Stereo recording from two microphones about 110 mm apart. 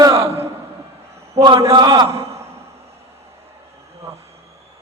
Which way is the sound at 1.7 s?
40° right (ahead or behind).